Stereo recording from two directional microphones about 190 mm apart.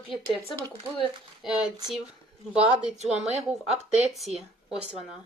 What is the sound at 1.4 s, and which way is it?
Speech, centre (ahead or behind).